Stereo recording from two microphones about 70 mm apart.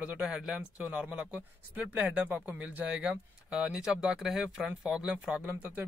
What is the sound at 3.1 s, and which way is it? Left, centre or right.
Speech, centre.